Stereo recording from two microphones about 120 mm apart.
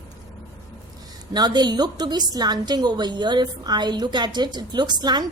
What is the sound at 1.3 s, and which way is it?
Speech, 35° right (ahead or behind).